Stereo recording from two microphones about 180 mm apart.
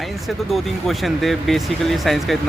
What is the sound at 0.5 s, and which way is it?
Speech, centre (ahead or behind).